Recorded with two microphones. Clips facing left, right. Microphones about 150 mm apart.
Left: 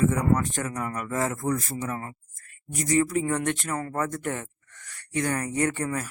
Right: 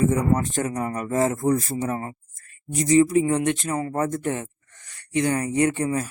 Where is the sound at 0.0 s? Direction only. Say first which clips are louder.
Right 2 dB; 25° right (ahead or behind).